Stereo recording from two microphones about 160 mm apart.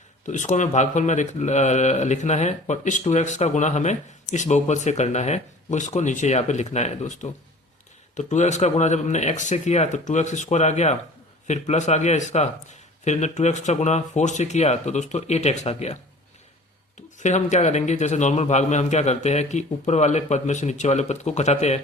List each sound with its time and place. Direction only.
0.3 s speech: 50° left (ahead or behind)
17.2 s speech: 45° left (ahead or behind)